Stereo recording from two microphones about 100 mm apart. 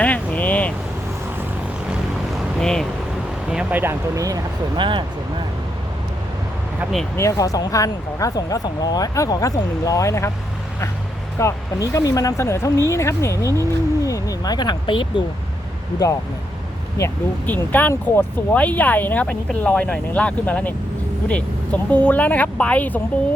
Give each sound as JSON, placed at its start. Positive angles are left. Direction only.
{"t": 0.0, "sound": "vehicle", "side_deg": 15}
{"t": 2.6, "sound": "speech", "side_deg": 5}
{"t": 3.5, "sound": "a sound", "side_deg": -10}
{"t": 4.1, "sound": "speech", "side_deg": -35}
{"t": 4.8, "sound": "speech", "side_deg": -50}
{"t": 7.2, "sound": "speech", "side_deg": 35}
{"t": 11.3, "sound": "speech", "side_deg": 30}
{"t": 17.0, "sound": "speech", "side_deg": 30}
{"t": 17.4, "sound": "speech", "side_deg": 15}